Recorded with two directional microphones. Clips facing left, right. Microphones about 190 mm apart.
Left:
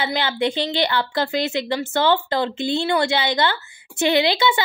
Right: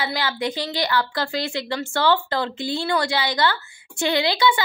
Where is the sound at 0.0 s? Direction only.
25° left (ahead or behind).